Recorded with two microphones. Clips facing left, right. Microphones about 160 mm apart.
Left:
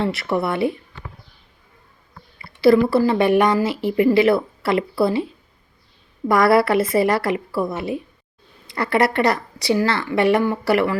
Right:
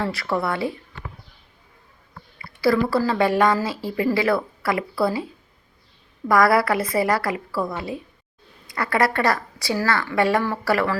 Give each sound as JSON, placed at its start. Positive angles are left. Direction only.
{"t": 0.0, "sound": "a woman's voice", "side_deg": 20}
{"t": 2.6, "sound": "a woman's voice", "side_deg": 25}
{"t": 6.2, "sound": "a woman's voice", "side_deg": 25}